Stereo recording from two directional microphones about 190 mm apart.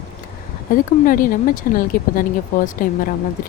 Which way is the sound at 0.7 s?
45° left (ahead or behind).